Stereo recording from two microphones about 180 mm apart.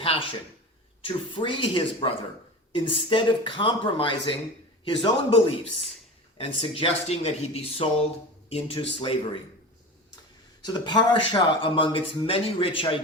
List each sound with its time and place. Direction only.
1.0 s speech: 30° left (ahead or behind)
10.7 s speech: 25° left (ahead or behind)